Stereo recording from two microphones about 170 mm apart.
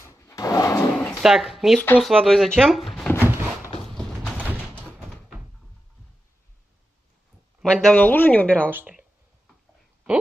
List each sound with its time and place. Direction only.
0.0 s drawer open or close: 15° left (ahead or behind)
1.2 s speech: centre (ahead or behind)
3.2 s a sound: 10° right (ahead or behind)
7.6 s speech: 5° left (ahead or behind)
8.6 s speech: 10° right (ahead or behind)